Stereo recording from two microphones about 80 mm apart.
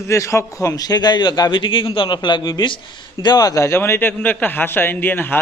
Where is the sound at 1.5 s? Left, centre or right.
Left.